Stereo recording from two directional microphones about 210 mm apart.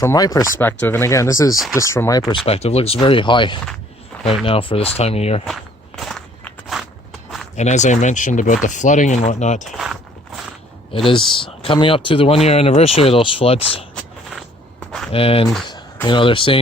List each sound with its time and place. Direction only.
0.0 s speech: 15° left (ahead or behind)
2.3 s speech: 25° left (ahead or behind)
4.1 s a sound: 5° left (ahead or behind)
4.4 s speech: 25° left (ahead or behind)
6.0 s walk: centre (ahead or behind)
7.5 s speech: 35° left (ahead or behind)
9.7 s walk: centre (ahead or behind)
10.9 s speech: 25° left (ahead or behind)
13.9 s a sound: centre (ahead or behind)
15.1 s speech: 25° left (ahead or behind)